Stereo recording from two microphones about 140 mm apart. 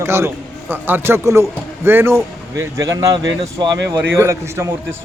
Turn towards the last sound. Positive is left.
turn(degrees=-20)  # may be behind; listen again after turning